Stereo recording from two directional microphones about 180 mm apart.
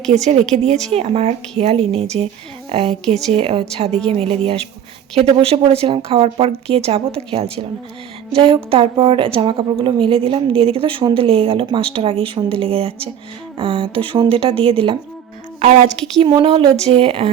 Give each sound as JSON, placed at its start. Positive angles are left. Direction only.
{"t": 0.1, "sound": "a woman's voice", "side_deg": -40}